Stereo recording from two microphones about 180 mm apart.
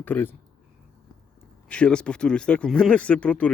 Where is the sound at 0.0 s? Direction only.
10° left (ahead or behind).